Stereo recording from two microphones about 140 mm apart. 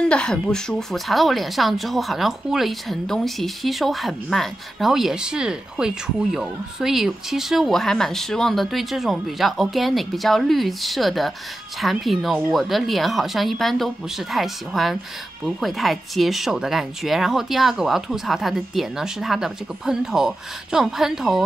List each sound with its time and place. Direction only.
0.1 s speech: 5° left (ahead or behind)